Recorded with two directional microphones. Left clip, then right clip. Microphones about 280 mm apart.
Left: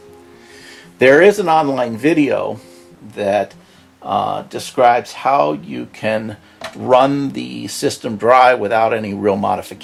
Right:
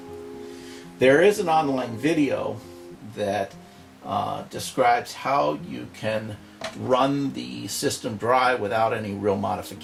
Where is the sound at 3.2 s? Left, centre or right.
Centre.